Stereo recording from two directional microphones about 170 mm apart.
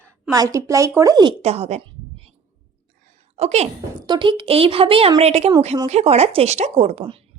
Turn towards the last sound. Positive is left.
turn(degrees=-35)  # may be behind; listen again after turning